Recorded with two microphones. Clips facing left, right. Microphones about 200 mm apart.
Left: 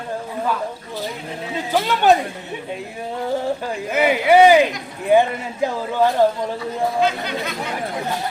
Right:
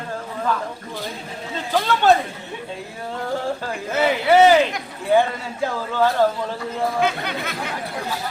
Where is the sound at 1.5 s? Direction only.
15° left (ahead or behind).